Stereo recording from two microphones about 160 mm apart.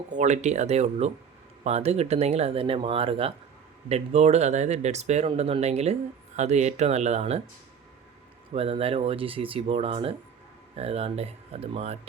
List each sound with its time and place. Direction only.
0.1 s speech: 50° right (ahead or behind)
8.5 s speech: 40° right (ahead or behind)